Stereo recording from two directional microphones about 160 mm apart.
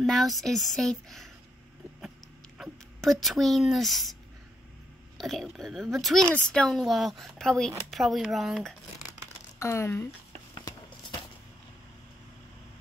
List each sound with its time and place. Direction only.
0.0 s speech: centre (ahead or behind)
2.6 s speech: centre (ahead or behind)
9.6 s speech: 15° left (ahead or behind)
10.5 s a sound: 25° left (ahead or behind)